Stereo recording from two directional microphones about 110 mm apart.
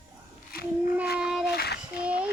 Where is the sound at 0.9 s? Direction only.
5° right (ahead or behind).